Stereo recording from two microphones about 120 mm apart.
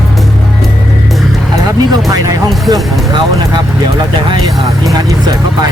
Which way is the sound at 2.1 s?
30° right (ahead or behind).